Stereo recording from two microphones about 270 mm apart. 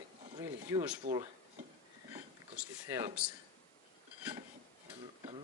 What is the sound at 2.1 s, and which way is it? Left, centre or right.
Speech, centre.